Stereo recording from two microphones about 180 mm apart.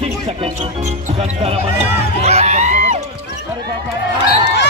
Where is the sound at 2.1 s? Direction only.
35° right (ahead or behind).